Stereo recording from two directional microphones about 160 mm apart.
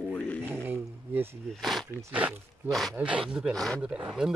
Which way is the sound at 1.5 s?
Centre (ahead or behind).